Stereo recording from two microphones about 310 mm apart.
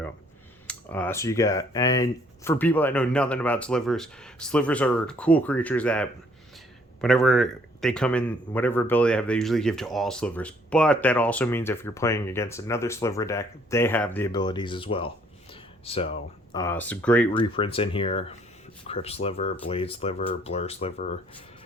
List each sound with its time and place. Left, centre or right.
0.7 s a man's voice: centre
17.3 s speech: centre